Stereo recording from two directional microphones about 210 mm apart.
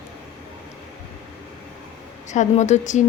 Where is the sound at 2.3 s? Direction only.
35° left (ahead or behind).